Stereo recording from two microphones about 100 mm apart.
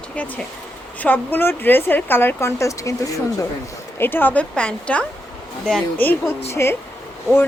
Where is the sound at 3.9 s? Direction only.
20° left (ahead or behind).